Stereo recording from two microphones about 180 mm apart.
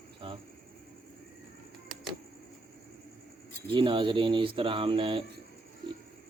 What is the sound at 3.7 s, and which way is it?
Speech, 25° right (ahead or behind).